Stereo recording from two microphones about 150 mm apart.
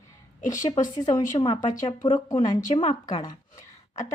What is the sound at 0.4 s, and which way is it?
Speech, 60° left (ahead or behind).